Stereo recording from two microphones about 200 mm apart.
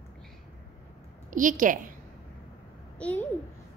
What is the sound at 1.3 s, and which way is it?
Speech, 40° right (ahead or behind).